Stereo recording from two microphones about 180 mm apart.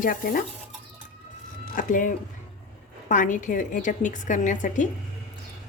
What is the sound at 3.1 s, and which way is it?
A woman's voice, 45° left (ahead or behind).